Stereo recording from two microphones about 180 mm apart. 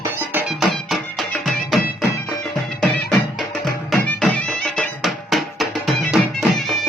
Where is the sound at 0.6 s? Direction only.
Centre (ahead or behind).